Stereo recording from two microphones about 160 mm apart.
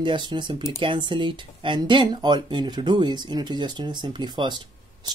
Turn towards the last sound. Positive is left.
turn(degrees=-30)  # may be behind; listen again after turning